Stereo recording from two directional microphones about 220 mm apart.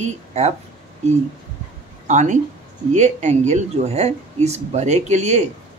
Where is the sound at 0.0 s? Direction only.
30° right (ahead or behind).